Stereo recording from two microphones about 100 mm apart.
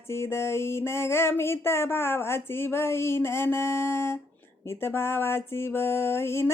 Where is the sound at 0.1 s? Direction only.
25° left (ahead or behind).